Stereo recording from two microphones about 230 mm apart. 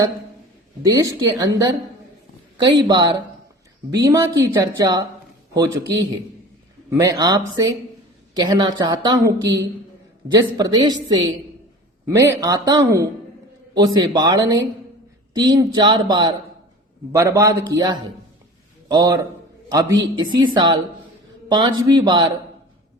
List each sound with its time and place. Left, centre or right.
0.8 s a man's voice: centre